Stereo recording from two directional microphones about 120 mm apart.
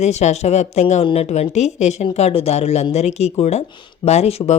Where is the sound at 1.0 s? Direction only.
60° left (ahead or behind).